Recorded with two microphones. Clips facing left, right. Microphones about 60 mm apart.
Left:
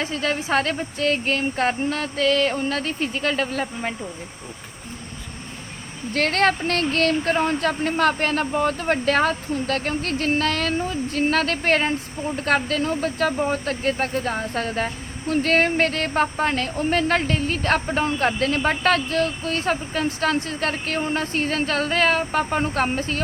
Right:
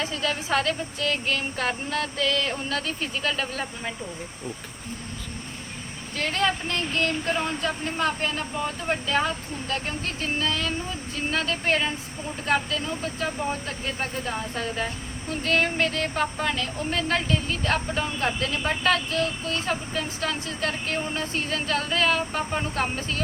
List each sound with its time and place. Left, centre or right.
0.0 s speech: left
6.1 s speech: left
7.3 s speech: left